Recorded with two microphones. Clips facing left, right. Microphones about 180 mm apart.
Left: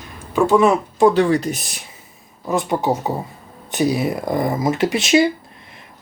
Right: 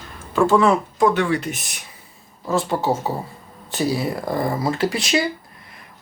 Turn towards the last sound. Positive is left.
turn(degrees=20)  # may be behind; listen again after turning